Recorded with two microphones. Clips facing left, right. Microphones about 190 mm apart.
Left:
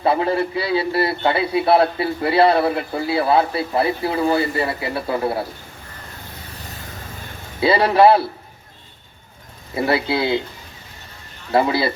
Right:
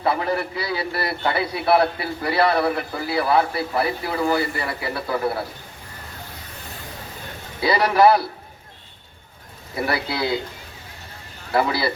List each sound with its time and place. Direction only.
0.0 s a man's voice: 25° left (ahead or behind)
7.6 s a man's voice: 25° left (ahead or behind)
9.7 s a man's voice: 25° left (ahead or behind)
11.5 s a man's voice: 25° left (ahead or behind)